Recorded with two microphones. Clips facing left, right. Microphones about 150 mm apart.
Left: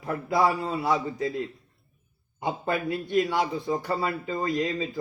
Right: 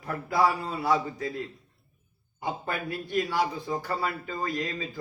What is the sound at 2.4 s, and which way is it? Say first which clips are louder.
A man's voice: left 4 dB; 20° left (ahead or behind).